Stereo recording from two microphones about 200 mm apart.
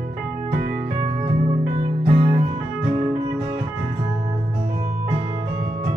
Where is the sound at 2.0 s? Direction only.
30° right (ahead or behind).